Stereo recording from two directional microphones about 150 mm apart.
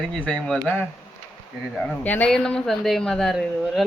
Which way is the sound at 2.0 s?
10° left (ahead or behind).